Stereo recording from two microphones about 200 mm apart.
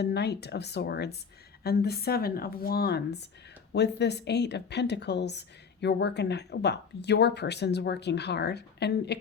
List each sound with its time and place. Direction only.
0.0 s a woman's voice: 55° left (ahead or behind)